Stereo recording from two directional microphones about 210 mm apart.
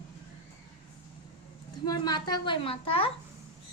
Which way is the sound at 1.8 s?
20° left (ahead or behind).